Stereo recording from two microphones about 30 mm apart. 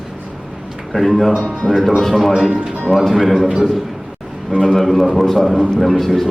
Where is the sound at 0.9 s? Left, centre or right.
Centre.